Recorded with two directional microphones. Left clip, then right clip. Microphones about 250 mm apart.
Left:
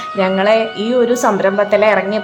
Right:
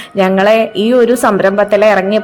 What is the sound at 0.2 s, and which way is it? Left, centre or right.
A man's voice, right.